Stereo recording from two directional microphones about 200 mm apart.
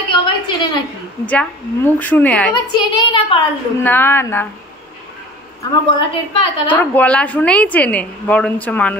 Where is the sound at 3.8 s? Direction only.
10° left (ahead or behind).